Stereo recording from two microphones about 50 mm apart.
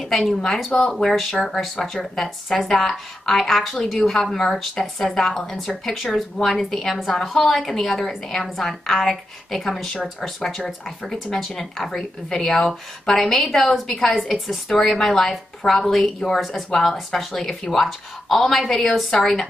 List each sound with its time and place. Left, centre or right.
0.0 s speech: centre
0.7 s a woman's voice: centre
1.4 s a woman's voice: centre